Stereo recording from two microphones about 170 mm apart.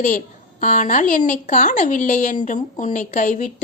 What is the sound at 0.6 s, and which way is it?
Speech, 45° left (ahead or behind).